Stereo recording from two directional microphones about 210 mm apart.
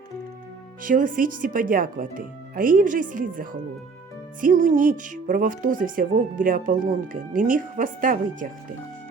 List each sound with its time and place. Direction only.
0.8 s speech: 40° right (ahead or behind)